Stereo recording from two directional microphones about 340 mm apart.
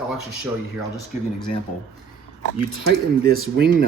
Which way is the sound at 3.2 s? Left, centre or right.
Right.